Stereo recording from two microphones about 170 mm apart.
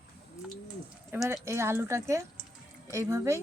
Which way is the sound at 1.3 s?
15° right (ahead or behind).